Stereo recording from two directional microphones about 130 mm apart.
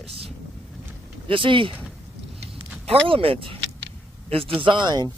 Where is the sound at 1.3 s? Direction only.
40° right (ahead or behind).